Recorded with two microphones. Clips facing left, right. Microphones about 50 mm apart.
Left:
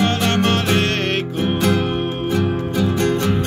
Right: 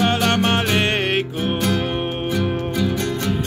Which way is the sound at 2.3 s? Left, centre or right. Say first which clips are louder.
Left 2 dB; left.